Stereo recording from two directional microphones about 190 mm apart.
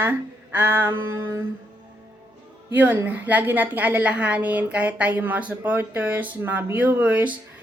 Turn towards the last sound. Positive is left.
turn(degrees=-10)  # may be behind; listen again after turning